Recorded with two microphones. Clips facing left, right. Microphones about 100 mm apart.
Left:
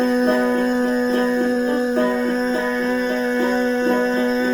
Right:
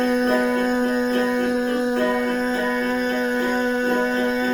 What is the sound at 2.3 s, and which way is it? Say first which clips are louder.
Music: left 2 dB; 15° right (ahead or behind).